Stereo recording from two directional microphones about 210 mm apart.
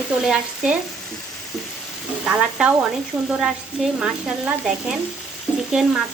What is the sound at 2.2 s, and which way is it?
Sizzle, 5° right (ahead or behind).